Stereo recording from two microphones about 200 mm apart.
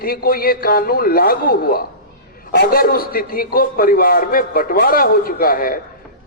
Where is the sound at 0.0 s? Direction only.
50° left (ahead or behind).